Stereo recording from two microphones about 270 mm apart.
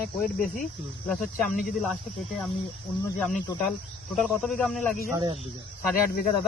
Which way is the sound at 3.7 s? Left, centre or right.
Centre.